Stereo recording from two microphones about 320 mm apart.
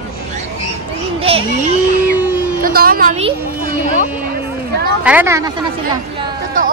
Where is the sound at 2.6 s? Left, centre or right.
Right.